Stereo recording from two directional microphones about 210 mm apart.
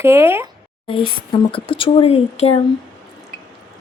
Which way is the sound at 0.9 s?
25° left (ahead or behind).